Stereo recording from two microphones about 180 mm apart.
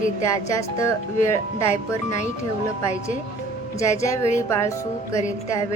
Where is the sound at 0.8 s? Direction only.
15° left (ahead or behind).